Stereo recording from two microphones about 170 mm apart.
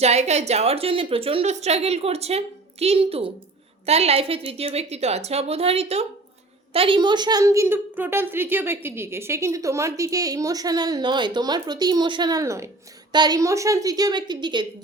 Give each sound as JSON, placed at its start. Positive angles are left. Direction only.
{"t": 0.0, "sound": "a woman's voice", "side_deg": -40}